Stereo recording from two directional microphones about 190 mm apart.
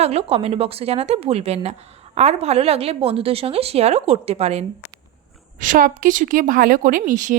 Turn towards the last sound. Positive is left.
turn(degrees=-45)  # may be behind; listen again after turning